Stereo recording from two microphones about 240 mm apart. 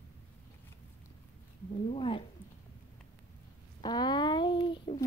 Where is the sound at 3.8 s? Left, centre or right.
Centre.